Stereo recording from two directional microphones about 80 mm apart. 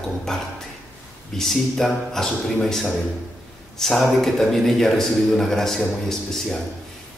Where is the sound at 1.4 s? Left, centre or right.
Centre.